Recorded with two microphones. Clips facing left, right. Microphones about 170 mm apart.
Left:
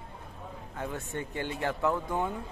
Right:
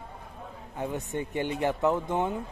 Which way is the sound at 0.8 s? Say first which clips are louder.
Right 4 dB; 20° right (ahead or behind).